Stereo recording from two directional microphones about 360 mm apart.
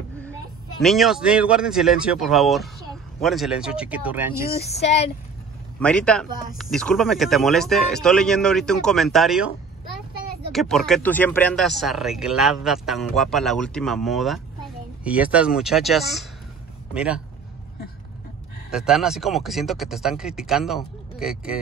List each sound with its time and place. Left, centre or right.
0.3 s speech: centre
4.5 s speech: left
5.8 s speech: centre
10.5 s speech: centre
18.7 s speech: centre